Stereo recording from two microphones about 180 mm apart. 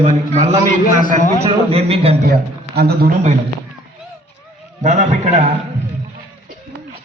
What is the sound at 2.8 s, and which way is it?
Speech, 60° right (ahead or behind).